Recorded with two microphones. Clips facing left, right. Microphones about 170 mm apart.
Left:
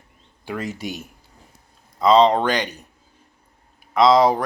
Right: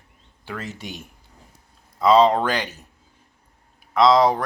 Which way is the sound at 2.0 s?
5° right (ahead or behind).